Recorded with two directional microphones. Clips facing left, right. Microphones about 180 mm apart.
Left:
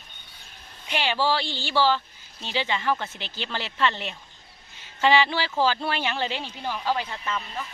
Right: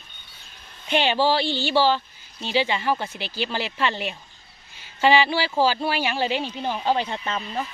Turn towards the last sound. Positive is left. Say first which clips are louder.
# right 3 dB
turn(degrees=-35)  # may be behind; listen again after turning